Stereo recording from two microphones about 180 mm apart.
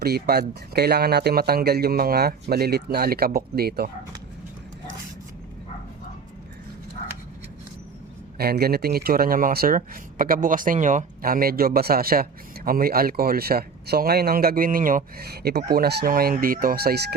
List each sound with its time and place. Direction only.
0.0 s speech: 60° right (ahead or behind)
8.4 s speech: 60° right (ahead or behind)